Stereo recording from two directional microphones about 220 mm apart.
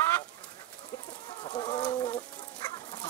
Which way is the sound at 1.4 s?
20° left (ahead or behind).